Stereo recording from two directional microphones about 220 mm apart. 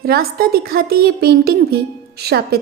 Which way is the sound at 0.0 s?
45° right (ahead or behind).